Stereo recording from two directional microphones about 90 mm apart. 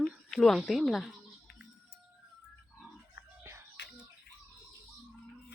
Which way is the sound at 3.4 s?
25° right (ahead or behind).